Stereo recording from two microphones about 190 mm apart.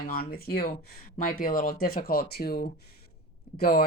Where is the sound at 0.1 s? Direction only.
50° left (ahead or behind).